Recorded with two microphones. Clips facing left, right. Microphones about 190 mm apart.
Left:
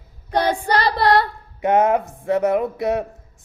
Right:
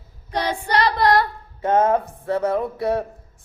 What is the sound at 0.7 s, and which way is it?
Speech, 35° left (ahead or behind).